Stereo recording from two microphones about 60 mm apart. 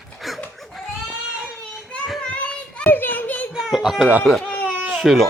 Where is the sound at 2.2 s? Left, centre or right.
Centre.